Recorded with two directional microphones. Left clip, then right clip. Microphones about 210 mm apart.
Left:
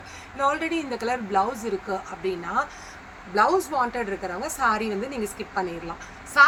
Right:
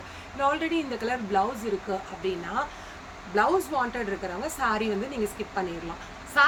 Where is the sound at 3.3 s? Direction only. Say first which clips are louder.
Left 3 dB; centre (ahead or behind).